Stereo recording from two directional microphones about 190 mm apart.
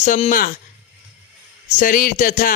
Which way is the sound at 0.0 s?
40° left (ahead or behind).